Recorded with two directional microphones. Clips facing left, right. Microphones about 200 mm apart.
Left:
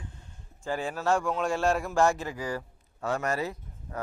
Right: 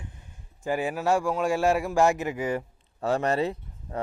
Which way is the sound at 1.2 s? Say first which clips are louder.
Right 3 dB; 5° right (ahead or behind).